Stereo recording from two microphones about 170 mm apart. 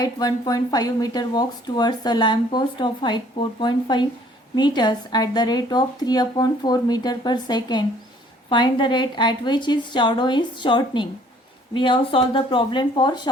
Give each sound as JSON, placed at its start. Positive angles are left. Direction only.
{"t": 0.0, "sound": "speech", "side_deg": 20}